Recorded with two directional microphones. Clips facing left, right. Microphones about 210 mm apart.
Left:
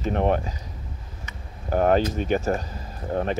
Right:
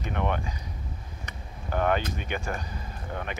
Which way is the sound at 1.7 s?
40° left (ahead or behind).